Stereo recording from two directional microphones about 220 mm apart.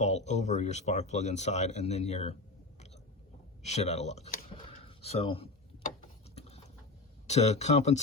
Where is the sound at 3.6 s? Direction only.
30° left (ahead or behind).